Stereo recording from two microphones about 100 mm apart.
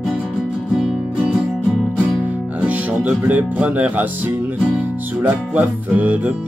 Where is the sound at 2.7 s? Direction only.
15° right (ahead or behind).